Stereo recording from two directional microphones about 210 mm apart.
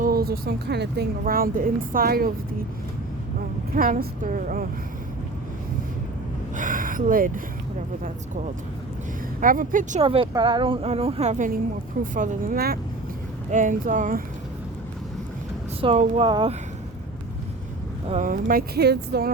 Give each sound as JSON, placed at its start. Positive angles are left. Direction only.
{"t": 0.0, "sound": "speech", "side_deg": -45}
{"t": 3.8, "sound": "a woman's voice", "side_deg": -40}
{"t": 6.5, "sound": "a sound", "side_deg": -40}
{"t": 9.4, "sound": "a woman's voice", "side_deg": -40}
{"t": 10.0, "sound": "a woman's voice", "side_deg": -25}
{"t": 15.8, "sound": "a woman's voice", "side_deg": -30}
{"t": 18.1, "sound": "speech", "side_deg": -40}